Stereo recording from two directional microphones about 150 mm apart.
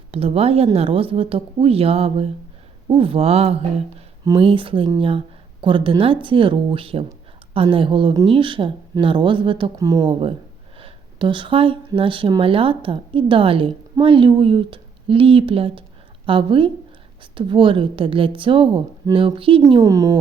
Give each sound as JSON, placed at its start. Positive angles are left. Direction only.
{"t": 0.1, "sound": "speech", "side_deg": -40}
{"t": 19.7, "sound": "a woman's voice", "side_deg": -25}